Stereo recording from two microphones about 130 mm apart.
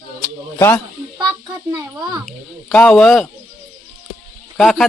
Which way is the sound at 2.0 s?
25° right (ahead or behind).